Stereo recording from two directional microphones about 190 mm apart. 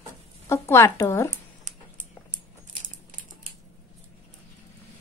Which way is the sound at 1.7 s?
40° right (ahead or behind).